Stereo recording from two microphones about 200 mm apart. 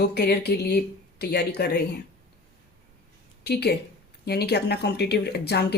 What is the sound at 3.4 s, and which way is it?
Speech, 55° left (ahead or behind).